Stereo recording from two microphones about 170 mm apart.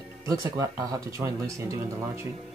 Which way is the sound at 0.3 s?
20° right (ahead or behind).